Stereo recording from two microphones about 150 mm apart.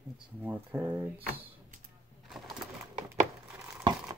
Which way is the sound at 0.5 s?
15° right (ahead or behind).